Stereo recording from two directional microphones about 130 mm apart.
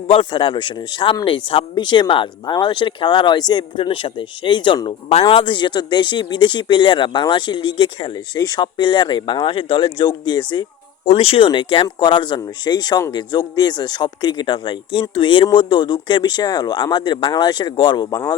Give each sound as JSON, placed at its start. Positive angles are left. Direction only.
{"t": 0.1, "sound": "speech", "side_deg": 40}
{"t": 11.1, "sound": "speech", "side_deg": 45}